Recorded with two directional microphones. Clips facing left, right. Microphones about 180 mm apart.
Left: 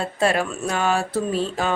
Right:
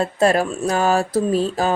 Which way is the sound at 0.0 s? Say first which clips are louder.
Right 4 dB; 40° right (ahead or behind).